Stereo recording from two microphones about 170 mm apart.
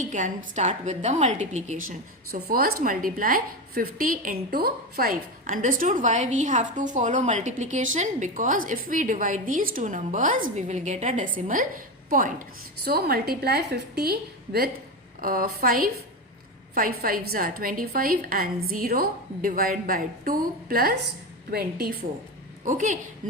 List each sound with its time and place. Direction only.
0.0 s a woman's voice: 45° right (ahead or behind); by 21.9 s 65° right (ahead or behind)
22.6 s a woman's voice: 50° right (ahead or behind)